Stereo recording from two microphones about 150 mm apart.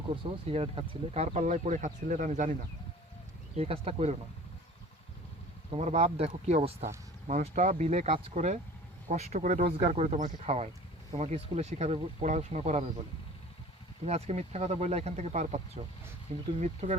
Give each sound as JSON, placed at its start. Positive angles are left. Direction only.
{"t": 0.2, "sound": "speech", "side_deg": -40}
{"t": 3.5, "sound": "speech", "side_deg": -40}
{"t": 5.7, "sound": "speech", "side_deg": -45}
{"t": 7.3, "sound": "speech", "side_deg": -55}
{"t": 14.0, "sound": "speech", "side_deg": -45}